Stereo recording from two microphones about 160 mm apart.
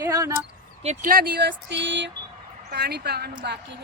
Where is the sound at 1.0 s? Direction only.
70° right (ahead or behind).